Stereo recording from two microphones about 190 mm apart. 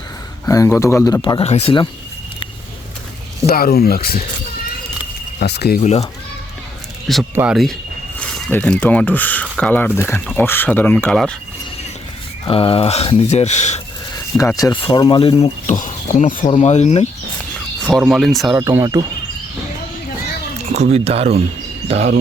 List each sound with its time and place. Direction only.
0.4 s a man's voice: 15° left (ahead or behind)
3.4 s speech: 50° left (ahead or behind)
5.4 s speech: 60° left (ahead or behind)
5.8 s speech: 35° left (ahead or behind)
7.3 s speech: 5° right (ahead or behind)
12.5 s speech: 30° left (ahead or behind)
14.3 s a man's voice: 15° left (ahead or behind)
15.8 s speech: 40° left (ahead or behind)
18.1 s speech: centre (ahead or behind)
18.6 s speech: 15° right (ahead or behind)
20.7 s speech: 35° right (ahead or behind)